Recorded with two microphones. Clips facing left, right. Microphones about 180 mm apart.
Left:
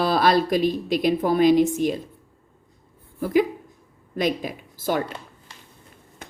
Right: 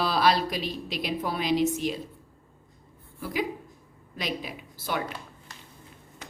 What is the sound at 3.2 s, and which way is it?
Speech, 50° left (ahead or behind).